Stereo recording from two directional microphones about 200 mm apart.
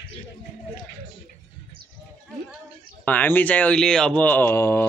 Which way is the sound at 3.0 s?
10° left (ahead or behind).